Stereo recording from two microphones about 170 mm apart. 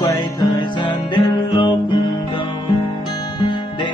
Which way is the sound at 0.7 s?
25° left (ahead or behind).